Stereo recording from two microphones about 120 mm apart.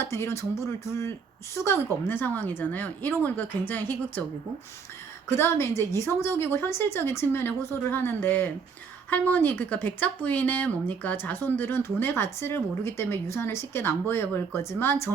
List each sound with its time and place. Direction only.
0.0 s a woman's voice: 20° left (ahead or behind)
5.4 s a woman's voice: 20° left (ahead or behind)